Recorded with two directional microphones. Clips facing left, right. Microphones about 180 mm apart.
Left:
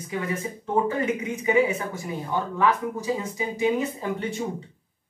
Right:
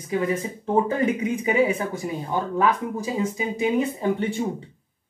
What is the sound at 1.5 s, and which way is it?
Speech, 30° right (ahead or behind).